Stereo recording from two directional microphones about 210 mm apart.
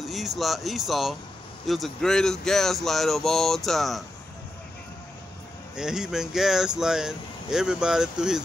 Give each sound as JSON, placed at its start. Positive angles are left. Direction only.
{"t": 0.0, "sound": "speech", "side_deg": 0}
{"t": 5.8, "sound": "speech", "side_deg": -5}